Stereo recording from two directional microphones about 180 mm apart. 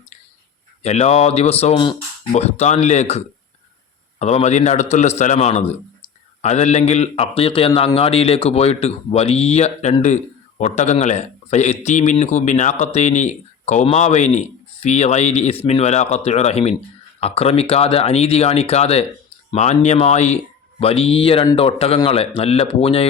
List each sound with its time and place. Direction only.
0.8 s a man's voice: 35° left (ahead or behind)
2.3 s a man's voice: 40° left (ahead or behind)